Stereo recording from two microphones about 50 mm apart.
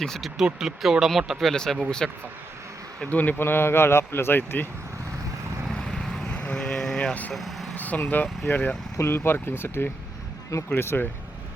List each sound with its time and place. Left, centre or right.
0.0 s speech: centre
0.3 s speech: centre
3.1 s speech: left
3.4 s speech: left
5.7 s vehicle: centre
6.2 s vehicle: left
7.3 s vehicle: centre
7.8 s speech: left
9.0 s speech: left